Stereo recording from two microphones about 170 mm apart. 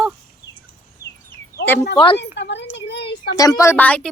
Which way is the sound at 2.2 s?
90° left.